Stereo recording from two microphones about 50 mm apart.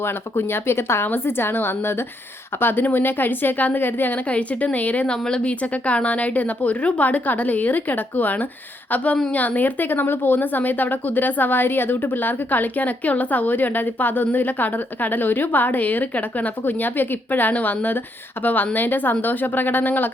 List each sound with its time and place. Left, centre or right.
0.0 s speech: left
1.0 s a woman's voice: left
2.6 s a woman's voice: left
4.3 s a woman's voice: left